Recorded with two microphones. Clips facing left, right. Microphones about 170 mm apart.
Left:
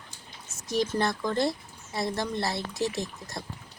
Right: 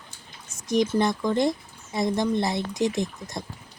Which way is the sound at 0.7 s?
15° right (ahead or behind).